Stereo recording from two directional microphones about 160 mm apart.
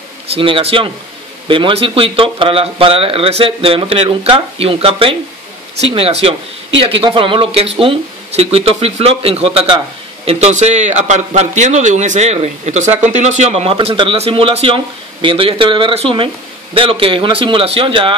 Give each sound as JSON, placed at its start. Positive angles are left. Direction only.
{"t": 0.3, "sound": "a man's voice", "side_deg": -35}